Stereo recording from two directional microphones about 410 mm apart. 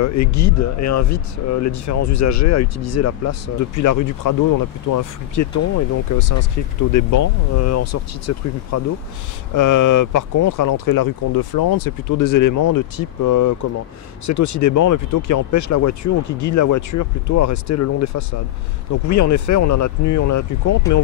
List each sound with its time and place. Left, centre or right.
0.0 s speech: left